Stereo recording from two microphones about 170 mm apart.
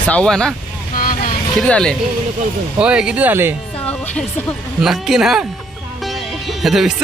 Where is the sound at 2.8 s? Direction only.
5° right (ahead or behind).